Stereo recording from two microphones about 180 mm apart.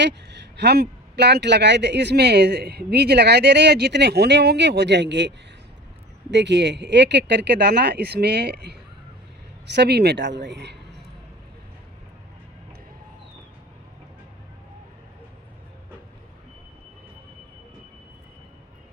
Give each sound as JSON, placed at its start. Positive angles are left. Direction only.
{"t": 0.0, "sound": "speech", "side_deg": -75}
{"t": 6.3, "sound": "speech", "side_deg": -75}